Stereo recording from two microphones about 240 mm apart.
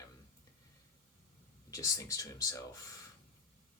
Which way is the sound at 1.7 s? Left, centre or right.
Centre.